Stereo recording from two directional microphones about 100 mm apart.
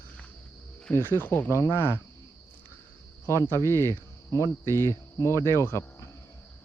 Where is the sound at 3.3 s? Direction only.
30° left (ahead or behind).